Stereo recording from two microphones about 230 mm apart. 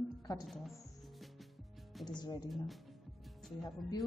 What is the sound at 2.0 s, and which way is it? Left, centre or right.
Speech, centre.